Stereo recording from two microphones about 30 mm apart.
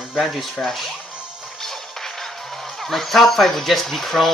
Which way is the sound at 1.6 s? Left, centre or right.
Centre.